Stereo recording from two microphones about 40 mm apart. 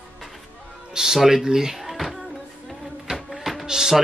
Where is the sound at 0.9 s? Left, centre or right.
Centre.